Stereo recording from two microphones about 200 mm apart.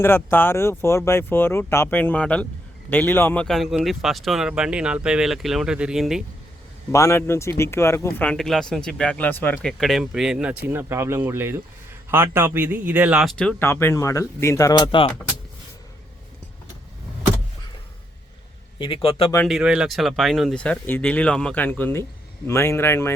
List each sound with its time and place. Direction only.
0.0 s speech: 10° left (ahead or behind)
6.9 s speech: 15° left (ahead or behind)
18.8 s speech: 25° left (ahead or behind)
19.5 s speech: 5° right (ahead or behind); by 23.1 s 10° left (ahead or behind)